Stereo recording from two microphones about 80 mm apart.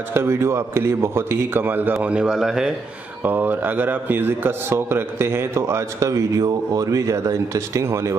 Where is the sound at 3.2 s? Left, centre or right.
Right.